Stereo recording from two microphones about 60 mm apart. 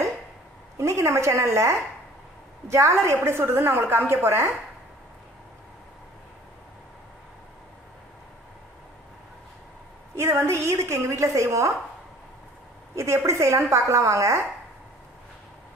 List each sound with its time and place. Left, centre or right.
0.7 s a woman's voice: right
10.1 s a woman's voice: right
12.9 s a woman's voice: right